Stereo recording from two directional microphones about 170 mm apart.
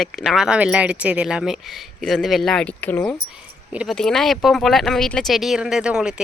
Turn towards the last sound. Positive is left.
turn(degrees=-5)  # may be behind; listen again after turning